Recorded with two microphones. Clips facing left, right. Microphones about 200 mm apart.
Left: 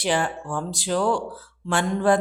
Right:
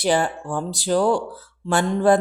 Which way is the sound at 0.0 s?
40° right (ahead or behind).